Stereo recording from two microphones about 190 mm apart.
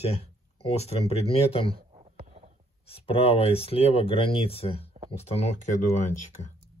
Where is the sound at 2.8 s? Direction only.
30° left (ahead or behind).